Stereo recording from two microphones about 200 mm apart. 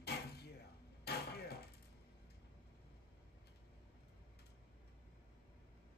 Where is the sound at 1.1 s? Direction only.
55° left (ahead or behind).